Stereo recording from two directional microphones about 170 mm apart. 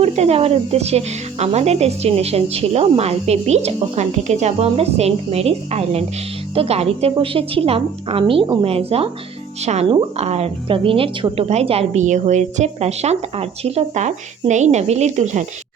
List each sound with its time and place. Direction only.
0.0 s speech: 35° right (ahead or behind)